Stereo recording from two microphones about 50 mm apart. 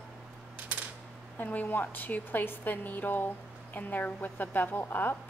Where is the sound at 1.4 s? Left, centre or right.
Left.